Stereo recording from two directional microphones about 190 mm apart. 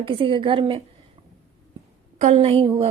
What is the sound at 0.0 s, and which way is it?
Speech, 30° right (ahead or behind).